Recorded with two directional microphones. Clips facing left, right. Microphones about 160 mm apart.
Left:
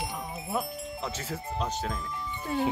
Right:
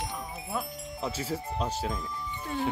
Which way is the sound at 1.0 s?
10° right (ahead or behind).